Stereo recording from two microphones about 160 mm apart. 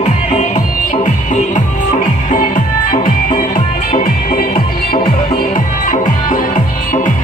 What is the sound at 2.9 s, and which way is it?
Music, 60° left (ahead or behind).